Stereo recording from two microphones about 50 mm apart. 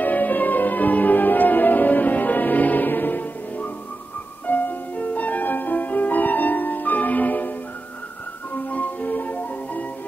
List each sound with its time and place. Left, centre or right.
0.0 s music: left
8.5 s music: left